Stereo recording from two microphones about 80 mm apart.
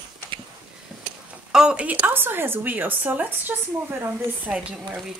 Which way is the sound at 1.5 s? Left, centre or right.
Centre.